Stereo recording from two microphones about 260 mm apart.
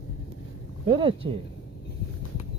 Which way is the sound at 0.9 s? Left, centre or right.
Right.